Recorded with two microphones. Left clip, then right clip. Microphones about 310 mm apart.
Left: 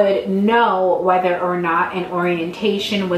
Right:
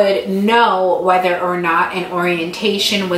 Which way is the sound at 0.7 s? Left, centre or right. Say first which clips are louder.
Right 2 dB; centre.